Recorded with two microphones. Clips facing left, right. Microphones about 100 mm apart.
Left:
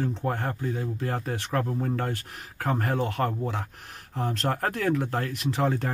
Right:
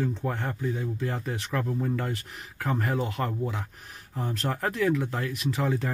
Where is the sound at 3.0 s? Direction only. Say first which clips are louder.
Left 2 dB; 55° left (ahead or behind).